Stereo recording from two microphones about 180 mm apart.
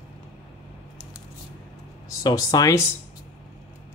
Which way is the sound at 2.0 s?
20° left (ahead or behind).